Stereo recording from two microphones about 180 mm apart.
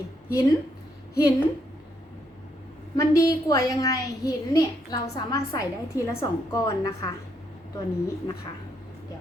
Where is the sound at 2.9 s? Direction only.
20° left (ahead or behind).